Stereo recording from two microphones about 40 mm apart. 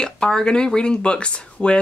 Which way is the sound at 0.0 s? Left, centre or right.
Centre.